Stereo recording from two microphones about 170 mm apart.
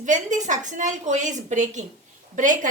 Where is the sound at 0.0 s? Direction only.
45° right (ahead or behind).